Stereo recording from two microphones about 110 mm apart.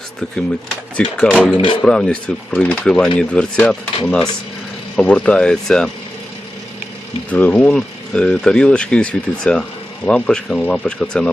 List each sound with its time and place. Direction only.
0.9 s speech: 10° left (ahead or behind)
1.5 s speech: 50° left (ahead or behind)
1.8 s speech: 5° left (ahead or behind)
7.3 s speech: 15° left (ahead or behind)